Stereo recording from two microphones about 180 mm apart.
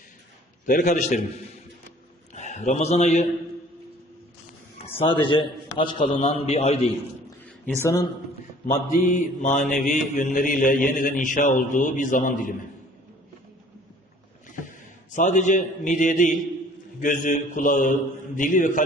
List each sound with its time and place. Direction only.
0.6 s a man's voice: 45° left (ahead or behind)
2.3 s a man's voice: 40° left (ahead or behind)
4.9 s a man's voice: 25° left (ahead or behind)
7.4 s a sound: 15° left (ahead or behind)
8.6 s mantra: 45° left (ahead or behind)
14.4 s a man's voice: 45° left (ahead or behind)
17.0 s mantra: 45° left (ahead or behind)